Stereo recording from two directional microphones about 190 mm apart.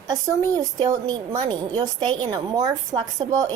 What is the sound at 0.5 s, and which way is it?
A woman's voice, 20° right (ahead or behind).